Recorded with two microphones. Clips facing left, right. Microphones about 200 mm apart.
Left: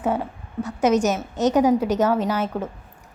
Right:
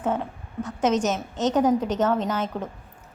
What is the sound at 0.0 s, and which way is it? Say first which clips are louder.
A woman's voice: left 2 dB; 10° left (ahead or behind).